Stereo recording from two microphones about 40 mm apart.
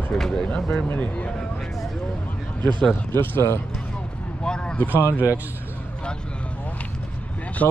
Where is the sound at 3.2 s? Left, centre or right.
Left.